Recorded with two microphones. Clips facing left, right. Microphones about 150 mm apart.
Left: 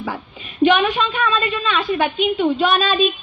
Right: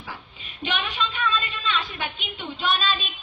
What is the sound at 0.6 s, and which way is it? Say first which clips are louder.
A woman's voice: left 13 dB; 55° left (ahead or behind).